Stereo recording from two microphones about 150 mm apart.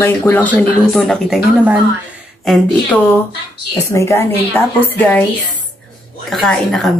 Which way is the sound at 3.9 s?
20° left (ahead or behind).